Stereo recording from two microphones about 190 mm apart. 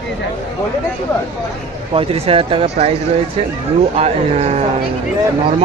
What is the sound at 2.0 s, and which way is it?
Speech, 30° right (ahead or behind).